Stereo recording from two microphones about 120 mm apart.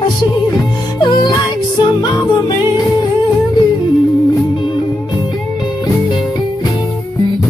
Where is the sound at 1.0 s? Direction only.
40° left (ahead or behind).